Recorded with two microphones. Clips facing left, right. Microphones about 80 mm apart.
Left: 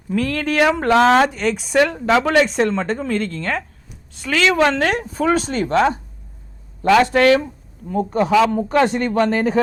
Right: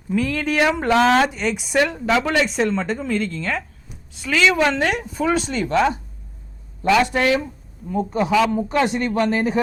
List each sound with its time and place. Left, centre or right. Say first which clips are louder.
0.1 s speech: left 1 dB; left
7.0 s speech: left 5 dB; left
7.9 s speech: left 2 dB; left